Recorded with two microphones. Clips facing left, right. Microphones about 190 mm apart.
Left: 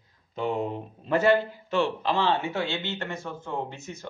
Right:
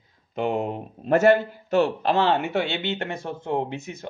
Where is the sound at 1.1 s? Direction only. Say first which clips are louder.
Right 4 dB; 45° right (ahead or behind); by 4.1 s 65° right (ahead or behind).